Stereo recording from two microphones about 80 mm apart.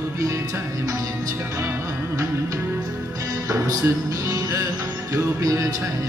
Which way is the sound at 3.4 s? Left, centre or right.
Right.